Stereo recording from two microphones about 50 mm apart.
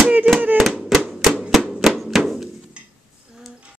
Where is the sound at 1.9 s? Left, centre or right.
Centre.